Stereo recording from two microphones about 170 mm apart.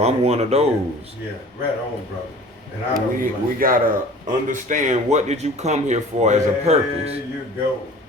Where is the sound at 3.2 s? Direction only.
55° right (ahead or behind).